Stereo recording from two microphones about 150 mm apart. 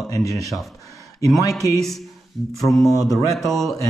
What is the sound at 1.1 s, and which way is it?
Speech, 20° left (ahead or behind).